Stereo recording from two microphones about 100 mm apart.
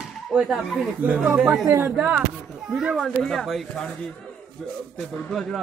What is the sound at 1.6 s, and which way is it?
Speech, 25° right (ahead or behind).